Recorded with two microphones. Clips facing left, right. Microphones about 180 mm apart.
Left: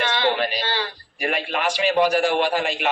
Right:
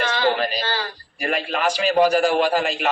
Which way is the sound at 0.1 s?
40° right (ahead or behind).